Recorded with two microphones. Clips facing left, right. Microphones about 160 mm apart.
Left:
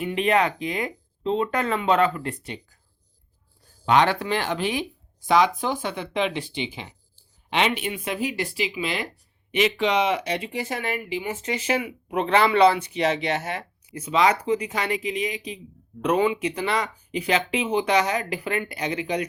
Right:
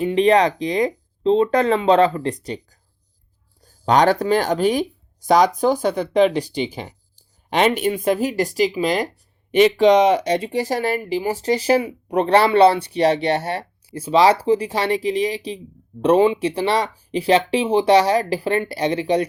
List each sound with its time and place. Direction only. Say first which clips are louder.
0.0 s speech: right 7 dB; 35° right (ahead or behind)
3.8 s speech: right 5 dB; 40° right (ahead or behind)